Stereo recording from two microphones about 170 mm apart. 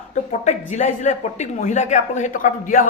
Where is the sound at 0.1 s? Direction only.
40° left (ahead or behind).